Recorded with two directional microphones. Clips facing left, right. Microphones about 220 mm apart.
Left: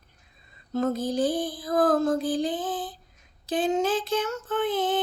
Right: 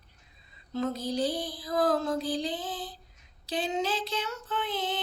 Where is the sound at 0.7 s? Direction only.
50° left (ahead or behind).